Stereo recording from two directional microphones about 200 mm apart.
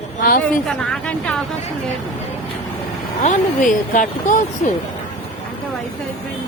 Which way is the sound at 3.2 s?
40° left (ahead or behind).